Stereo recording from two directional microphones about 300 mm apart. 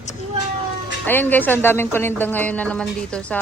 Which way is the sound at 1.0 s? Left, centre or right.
Centre.